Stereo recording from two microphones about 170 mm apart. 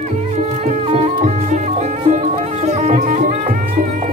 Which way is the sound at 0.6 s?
45° right (ahead or behind).